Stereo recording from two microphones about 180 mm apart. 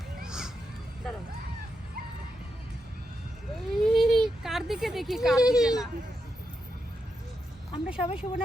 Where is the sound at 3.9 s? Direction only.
Centre (ahead or behind).